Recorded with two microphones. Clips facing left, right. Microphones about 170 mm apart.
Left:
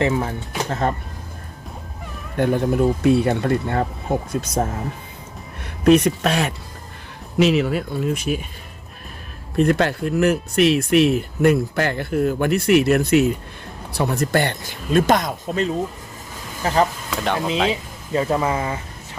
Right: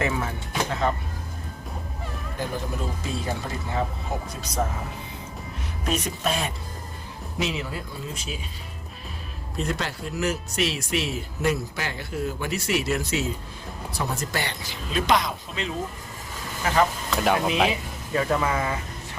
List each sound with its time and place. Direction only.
0.0 s speech: 35° left (ahead or behind)
2.3 s speech: 65° left (ahead or behind)
5.8 s speech: 65° left (ahead or behind)
9.6 s speech: 60° left (ahead or behind)
16.6 s speech: 35° left (ahead or behind)
17.2 s speech: 5° right (ahead or behind)
17.7 s speech: 25° left (ahead or behind)